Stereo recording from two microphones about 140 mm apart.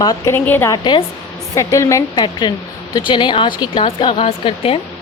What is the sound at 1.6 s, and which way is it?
A woman's voice, 20° left (ahead or behind).